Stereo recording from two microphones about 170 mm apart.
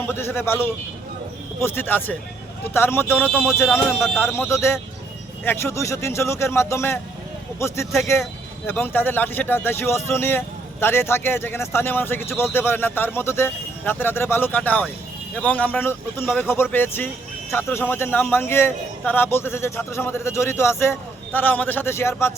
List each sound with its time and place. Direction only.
0.0 s speech: 15° left (ahead or behind)